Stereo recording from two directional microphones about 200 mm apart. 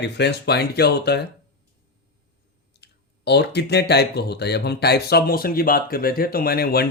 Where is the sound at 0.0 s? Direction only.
55° left (ahead or behind).